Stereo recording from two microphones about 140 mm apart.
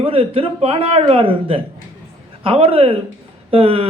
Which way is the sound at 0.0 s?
40° right (ahead or behind).